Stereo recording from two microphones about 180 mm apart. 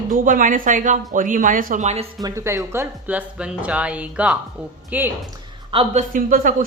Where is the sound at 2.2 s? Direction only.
15° right (ahead or behind).